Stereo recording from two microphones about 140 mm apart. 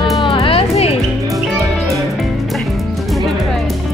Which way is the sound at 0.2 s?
40° left (ahead or behind).